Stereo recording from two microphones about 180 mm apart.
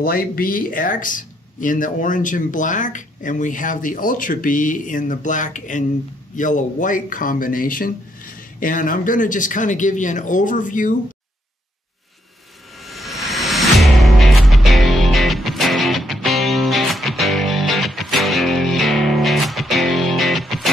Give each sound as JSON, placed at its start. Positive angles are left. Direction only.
{"t": 0.0, "sound": "speech", "side_deg": 55}
{"t": 12.8, "sound": "music", "side_deg": 0}